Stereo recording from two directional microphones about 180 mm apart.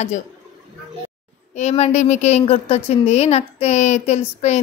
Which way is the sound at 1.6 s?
35° left (ahead or behind).